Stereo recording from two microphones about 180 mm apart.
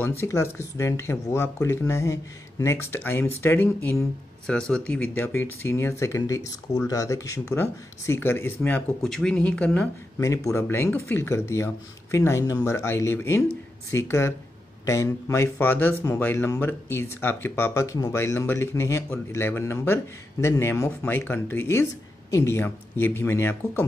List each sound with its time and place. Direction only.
0.0 s speech: 15° left (ahead or behind)
10.2 s speech: 15° left (ahead or behind)